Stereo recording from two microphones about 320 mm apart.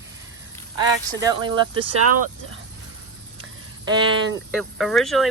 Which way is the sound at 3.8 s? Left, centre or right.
Right.